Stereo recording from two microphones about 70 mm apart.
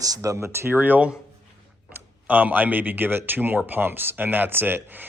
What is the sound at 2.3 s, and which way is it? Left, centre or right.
Speech, right.